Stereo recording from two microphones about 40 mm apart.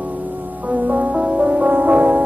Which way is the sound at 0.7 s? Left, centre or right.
Right.